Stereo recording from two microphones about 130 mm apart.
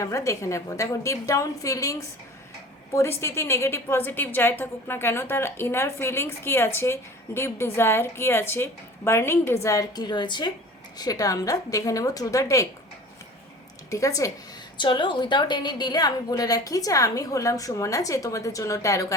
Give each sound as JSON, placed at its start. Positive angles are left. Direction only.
{"t": 0.0, "sound": "a woman's voice", "side_deg": 25}
{"t": 13.9, "sound": "a woman's voice", "side_deg": 25}
{"t": 14.8, "sound": "a woman's voice", "side_deg": 35}